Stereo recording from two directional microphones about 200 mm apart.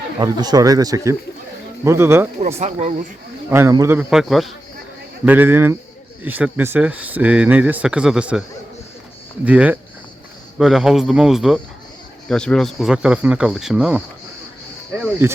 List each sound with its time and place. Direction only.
0.2 s speech: 20° right (ahead or behind)
2.6 s speech: 35° right (ahead or behind)
3.5 s speech: 15° right (ahead or behind)
15.2 s speech: 10° right (ahead or behind)